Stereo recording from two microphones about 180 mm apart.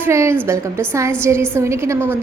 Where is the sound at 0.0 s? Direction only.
15° right (ahead or behind).